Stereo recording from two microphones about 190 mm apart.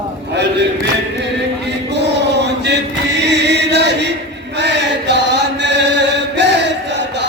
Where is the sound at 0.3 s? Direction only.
65° right (ahead or behind).